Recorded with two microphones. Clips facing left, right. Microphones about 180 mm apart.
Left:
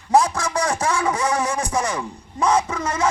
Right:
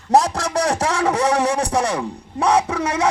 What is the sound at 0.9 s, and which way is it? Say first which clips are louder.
Speech: right 3 dB; 40° right (ahead or behind).